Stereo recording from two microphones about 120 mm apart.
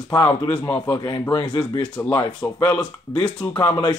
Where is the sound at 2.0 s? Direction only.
20° left (ahead or behind).